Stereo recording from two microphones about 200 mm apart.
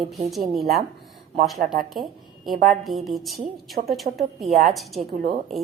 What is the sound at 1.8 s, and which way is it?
A woman's voice, centre (ahead or behind).